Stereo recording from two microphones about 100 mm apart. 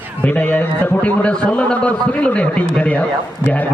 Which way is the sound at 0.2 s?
15° left (ahead or behind).